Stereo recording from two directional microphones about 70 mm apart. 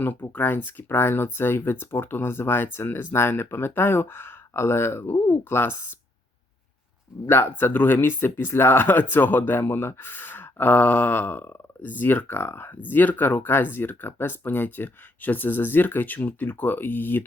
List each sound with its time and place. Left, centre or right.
0.0 s speech: left
7.3 s speech: left